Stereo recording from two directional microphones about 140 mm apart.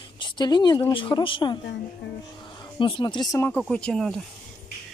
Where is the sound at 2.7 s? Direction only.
35° left (ahead or behind).